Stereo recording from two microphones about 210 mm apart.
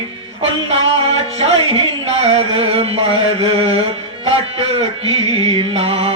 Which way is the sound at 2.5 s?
30° right (ahead or behind).